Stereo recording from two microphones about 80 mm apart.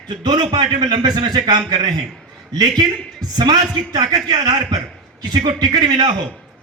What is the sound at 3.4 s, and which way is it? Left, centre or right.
A man's voice, right.